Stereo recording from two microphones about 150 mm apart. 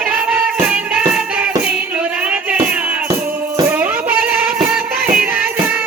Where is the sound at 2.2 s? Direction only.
10° right (ahead or behind).